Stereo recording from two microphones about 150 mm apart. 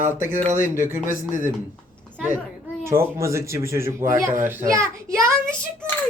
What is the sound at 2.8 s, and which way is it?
Speech, 20° right (ahead or behind).